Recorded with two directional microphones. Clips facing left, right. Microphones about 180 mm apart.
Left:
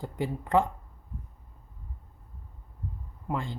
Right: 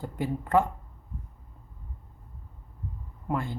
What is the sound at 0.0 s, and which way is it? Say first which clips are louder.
Speech: right 1 dB; 15° left (ahead or behind).